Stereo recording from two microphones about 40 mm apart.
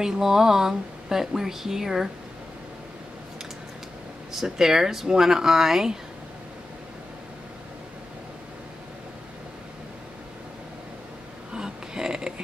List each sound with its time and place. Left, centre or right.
0.0 s speech: centre
4.3 s speech: centre
11.5 s a sound: centre